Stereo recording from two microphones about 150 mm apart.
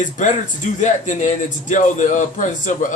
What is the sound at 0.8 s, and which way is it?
A man's voice, 55° left (ahead or behind).